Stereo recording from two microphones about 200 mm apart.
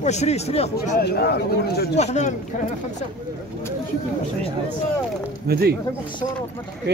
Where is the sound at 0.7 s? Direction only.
50° left (ahead or behind).